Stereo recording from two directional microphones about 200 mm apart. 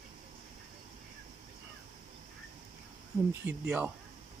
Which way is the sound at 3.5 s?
10° right (ahead or behind).